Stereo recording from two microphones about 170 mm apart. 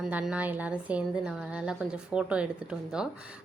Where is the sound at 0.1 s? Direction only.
10° right (ahead or behind).